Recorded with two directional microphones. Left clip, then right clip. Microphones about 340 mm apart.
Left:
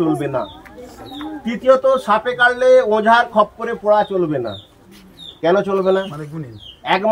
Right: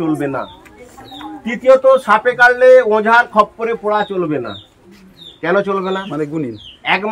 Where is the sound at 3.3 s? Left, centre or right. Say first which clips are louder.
Right 3 dB; right.